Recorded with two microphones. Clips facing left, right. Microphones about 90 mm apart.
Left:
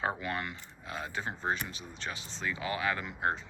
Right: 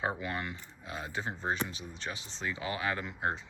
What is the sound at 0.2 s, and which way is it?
Speech, 20° right (ahead or behind).